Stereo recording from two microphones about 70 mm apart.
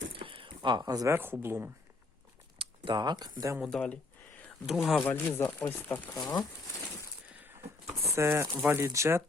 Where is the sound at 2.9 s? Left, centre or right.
Right.